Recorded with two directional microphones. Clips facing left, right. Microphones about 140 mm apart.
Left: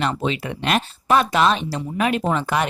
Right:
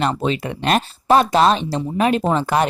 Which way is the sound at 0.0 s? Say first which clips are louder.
Right 3 dB; 40° right (ahead or behind).